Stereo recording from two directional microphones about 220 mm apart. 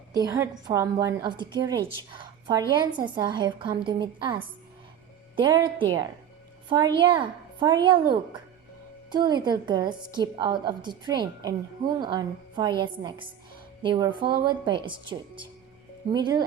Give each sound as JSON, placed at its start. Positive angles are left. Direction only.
{"t": 0.1, "sound": "a woman's voice", "side_deg": -15}
{"t": 5.4, "sound": "a woman's voice", "side_deg": -20}
{"t": 9.0, "sound": "a woman's voice", "side_deg": -20}